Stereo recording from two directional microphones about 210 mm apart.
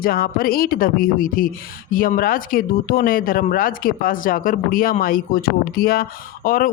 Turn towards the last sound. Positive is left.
turn(degrees=45)  # may be behind; listen again after turning